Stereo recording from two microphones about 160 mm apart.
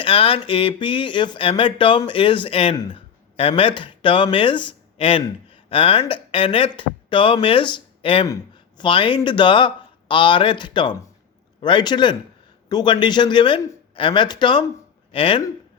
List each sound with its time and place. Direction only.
0.0 s speech: 35° left (ahead or behind)